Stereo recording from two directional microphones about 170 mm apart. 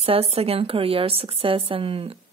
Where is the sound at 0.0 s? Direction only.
35° right (ahead or behind).